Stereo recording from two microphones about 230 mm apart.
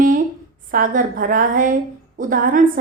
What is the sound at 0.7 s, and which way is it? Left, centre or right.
A woman's voice, right.